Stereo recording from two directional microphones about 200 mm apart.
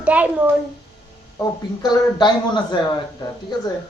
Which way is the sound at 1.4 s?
20° left (ahead or behind).